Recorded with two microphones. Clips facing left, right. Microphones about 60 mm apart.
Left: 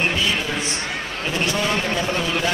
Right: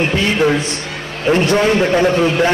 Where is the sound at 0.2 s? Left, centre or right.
Right.